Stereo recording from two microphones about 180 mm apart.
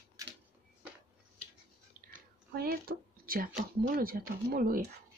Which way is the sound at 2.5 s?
55° right (ahead or behind).